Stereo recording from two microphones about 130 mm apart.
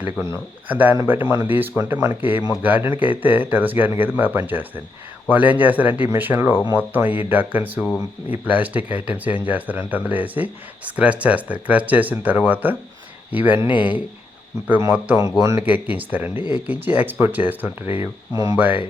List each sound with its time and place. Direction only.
0.0 s speech: 15° right (ahead or behind)
14.8 s speech: 15° right (ahead or behind)
15.6 s speech: 10° right (ahead or behind)
16.3 s speech: 35° left (ahead or behind)
16.6 s speech: 15° right (ahead or behind)
18.0 s speech: 30° right (ahead or behind)
18.5 s speech: 15° right (ahead or behind)